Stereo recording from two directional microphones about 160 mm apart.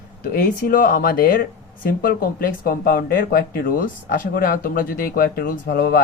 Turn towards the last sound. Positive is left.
turn(degrees=75)  # may be behind; listen again after turning